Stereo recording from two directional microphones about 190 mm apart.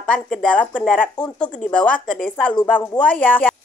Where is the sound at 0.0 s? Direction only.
5° left (ahead or behind).